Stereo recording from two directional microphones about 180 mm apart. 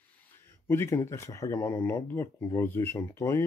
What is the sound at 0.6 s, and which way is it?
Speech, 15° left (ahead or behind).